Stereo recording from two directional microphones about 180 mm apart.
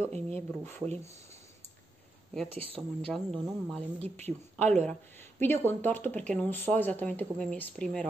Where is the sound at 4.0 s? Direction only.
35° right (ahead or behind).